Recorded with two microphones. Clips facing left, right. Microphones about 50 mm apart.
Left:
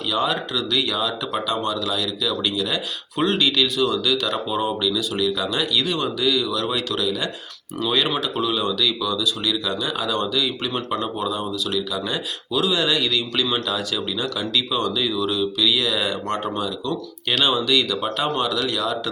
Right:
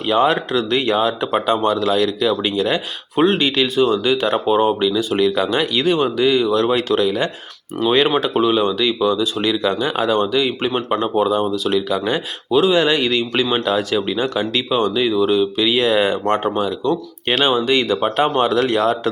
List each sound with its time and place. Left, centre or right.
0.1 s speech: right
11.0 s speech: right